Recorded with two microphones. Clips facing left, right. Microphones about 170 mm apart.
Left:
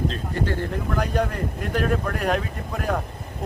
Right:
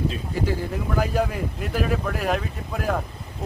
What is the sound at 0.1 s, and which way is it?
Speech, 5° right (ahead or behind).